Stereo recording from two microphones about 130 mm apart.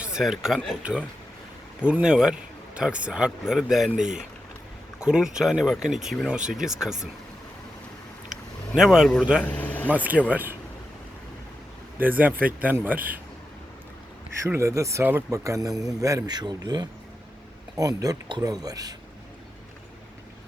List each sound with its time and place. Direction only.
0.0 s speech: 5° right (ahead or behind)
8.7 s speech: 5° right (ahead or behind)
9.4 s a sound: 10° left (ahead or behind)
9.9 s speech: 10° right (ahead or behind)
11.9 s speech: 15° right (ahead or behind)
14.4 s speech: 20° right (ahead or behind)